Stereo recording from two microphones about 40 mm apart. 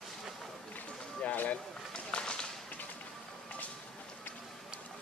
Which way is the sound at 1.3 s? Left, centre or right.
Left.